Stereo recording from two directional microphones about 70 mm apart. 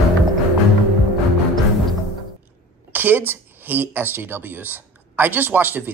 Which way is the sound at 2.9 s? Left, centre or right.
Right.